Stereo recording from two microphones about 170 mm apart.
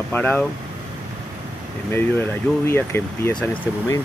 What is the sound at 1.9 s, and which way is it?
Speech, 10° left (ahead or behind).